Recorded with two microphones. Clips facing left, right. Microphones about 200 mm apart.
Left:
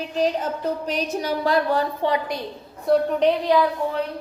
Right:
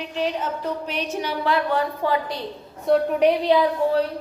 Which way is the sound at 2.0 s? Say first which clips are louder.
Left 1 dB; 20° left (ahead or behind).